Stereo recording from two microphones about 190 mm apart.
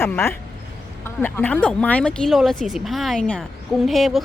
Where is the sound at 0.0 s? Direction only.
15° left (ahead or behind).